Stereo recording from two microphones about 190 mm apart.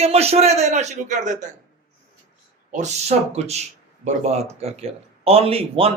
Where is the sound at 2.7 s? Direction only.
35° right (ahead or behind).